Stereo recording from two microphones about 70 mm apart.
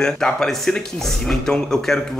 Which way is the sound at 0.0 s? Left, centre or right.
Centre.